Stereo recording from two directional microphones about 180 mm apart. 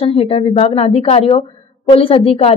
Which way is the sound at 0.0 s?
35° left (ahead or behind).